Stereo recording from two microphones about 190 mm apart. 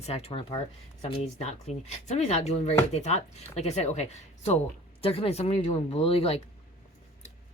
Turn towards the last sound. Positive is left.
turn(degrees=30)  # may be behind; listen again after turning